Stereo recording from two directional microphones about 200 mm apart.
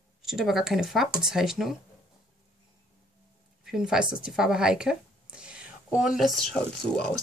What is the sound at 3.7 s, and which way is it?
Speech, 5° right (ahead or behind).